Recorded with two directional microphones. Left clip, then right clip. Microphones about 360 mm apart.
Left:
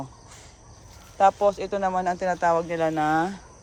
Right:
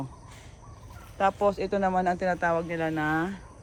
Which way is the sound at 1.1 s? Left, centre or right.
Centre.